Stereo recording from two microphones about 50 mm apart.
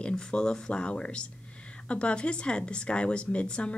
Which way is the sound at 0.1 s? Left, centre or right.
Centre.